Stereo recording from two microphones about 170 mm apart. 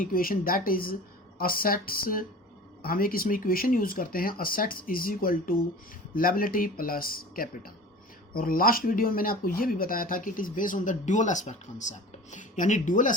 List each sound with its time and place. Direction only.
0.0 s speech: 60° left (ahead or behind)